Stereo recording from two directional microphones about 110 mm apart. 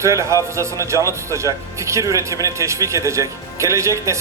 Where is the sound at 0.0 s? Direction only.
25° right (ahead or behind).